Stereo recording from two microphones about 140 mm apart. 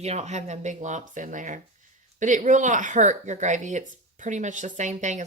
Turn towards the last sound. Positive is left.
turn(degrees=-60)  # may be behind; listen again after turning